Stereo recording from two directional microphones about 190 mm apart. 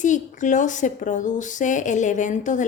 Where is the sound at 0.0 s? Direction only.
40° left (ahead or behind).